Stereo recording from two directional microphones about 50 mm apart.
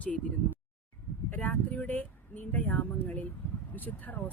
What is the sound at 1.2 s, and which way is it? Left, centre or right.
Speech, left.